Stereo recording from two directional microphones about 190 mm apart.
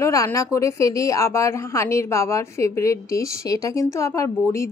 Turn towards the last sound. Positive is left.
turn(degrees=15)  # may be behind; listen again after turning